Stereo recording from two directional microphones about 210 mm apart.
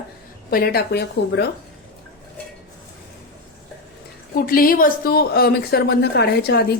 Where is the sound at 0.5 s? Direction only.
45° left (ahead or behind).